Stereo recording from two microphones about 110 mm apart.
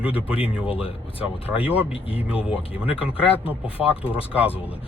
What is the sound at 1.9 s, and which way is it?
Speech, 60° left (ahead or behind).